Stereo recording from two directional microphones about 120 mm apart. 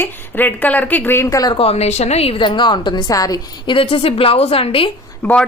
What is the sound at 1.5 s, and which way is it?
Speech, 60° left (ahead or behind).